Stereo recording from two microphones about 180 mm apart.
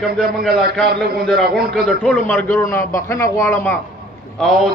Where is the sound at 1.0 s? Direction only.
Centre (ahead or behind).